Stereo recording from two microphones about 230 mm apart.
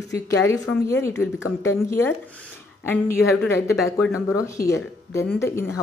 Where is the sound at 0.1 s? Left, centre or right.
Centre.